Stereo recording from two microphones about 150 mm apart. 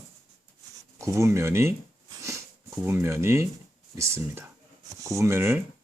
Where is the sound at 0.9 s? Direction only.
20° right (ahead or behind).